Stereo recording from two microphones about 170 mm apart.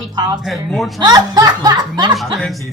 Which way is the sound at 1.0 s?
25° right (ahead or behind).